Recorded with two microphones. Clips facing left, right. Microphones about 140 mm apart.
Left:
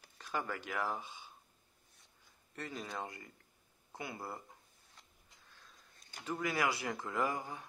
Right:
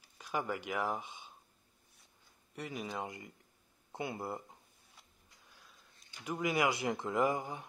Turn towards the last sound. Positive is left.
turn(degrees=-20)  # may be behind; listen again after turning